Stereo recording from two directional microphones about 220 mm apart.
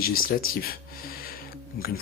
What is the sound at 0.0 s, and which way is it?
Speech, 40° left (ahead or behind).